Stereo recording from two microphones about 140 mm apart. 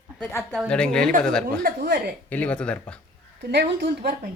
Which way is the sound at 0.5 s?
5° left (ahead or behind).